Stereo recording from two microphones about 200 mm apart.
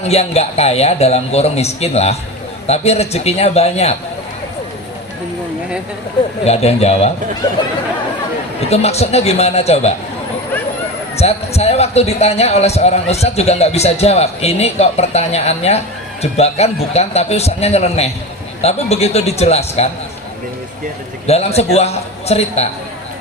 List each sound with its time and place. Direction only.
0.0 s a man's voice: 30° left (ahead or behind)
6.4 s a man's voice: 30° left (ahead or behind)
8.7 s a man's voice: 30° left (ahead or behind)
11.2 s a man's voice: 30° left (ahead or behind)
21.2 s a man's voice: 30° left (ahead or behind)